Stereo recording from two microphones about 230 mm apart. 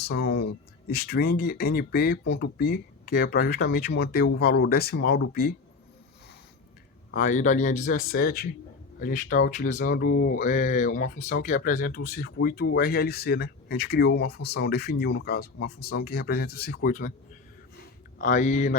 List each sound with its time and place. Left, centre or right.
0.0 s speech: left
7.1 s speech: left
17.7 s a sound: left